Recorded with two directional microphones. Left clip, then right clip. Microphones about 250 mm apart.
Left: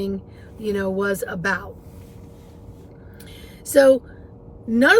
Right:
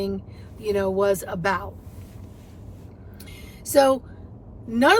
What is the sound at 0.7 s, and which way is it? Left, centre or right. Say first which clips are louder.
Speech: right 2 dB; centre.